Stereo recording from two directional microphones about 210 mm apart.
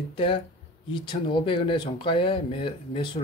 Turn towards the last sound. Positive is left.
turn(degrees=25)  # may be behind; listen again after turning